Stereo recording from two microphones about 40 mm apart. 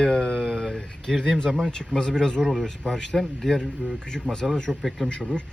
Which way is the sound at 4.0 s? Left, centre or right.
Centre.